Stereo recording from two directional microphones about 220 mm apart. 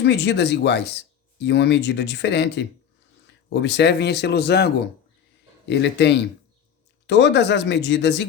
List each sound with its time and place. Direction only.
0.0 s speech: 50° left (ahead or behind)